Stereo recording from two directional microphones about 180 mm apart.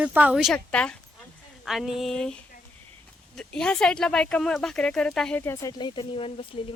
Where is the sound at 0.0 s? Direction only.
10° right (ahead or behind).